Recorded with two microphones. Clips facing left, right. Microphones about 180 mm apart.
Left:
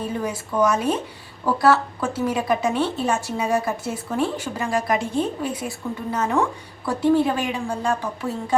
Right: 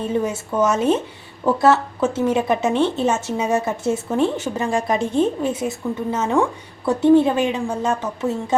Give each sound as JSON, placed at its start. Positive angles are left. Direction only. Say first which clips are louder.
{"t": 0.3, "sound": "a woman's voice", "louder": "right 1 dB", "side_deg": -25}